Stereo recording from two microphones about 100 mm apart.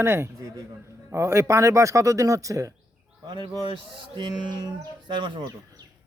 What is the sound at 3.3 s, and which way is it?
Speech, 55° right (ahead or behind).